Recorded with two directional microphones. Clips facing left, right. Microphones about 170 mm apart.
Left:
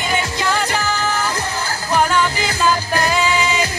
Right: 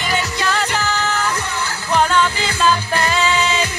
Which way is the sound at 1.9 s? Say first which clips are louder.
Right 1 dB; 10° left (ahead or behind).